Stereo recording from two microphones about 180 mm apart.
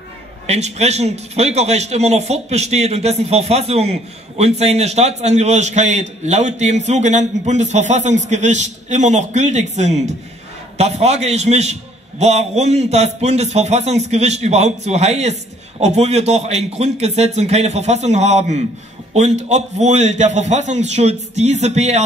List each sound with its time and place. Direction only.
0.5 s a man's voice: 35° right (ahead or behind)